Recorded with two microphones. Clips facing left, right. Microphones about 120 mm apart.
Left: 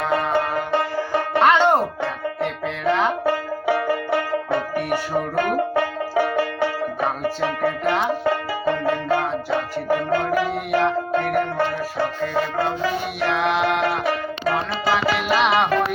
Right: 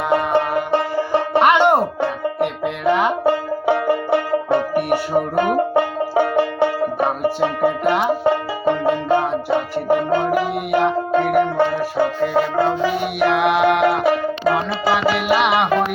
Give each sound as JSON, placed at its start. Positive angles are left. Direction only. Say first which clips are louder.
{"t": 0.1, "sound": "music", "louder": "right 5 dB", "side_deg": -15}